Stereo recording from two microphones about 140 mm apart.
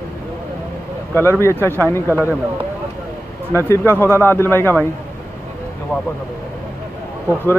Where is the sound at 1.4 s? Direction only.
15° left (ahead or behind).